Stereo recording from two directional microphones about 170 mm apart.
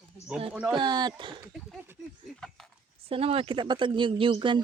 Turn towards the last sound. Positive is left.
turn(degrees=-30)  # may be behind; listen again after turning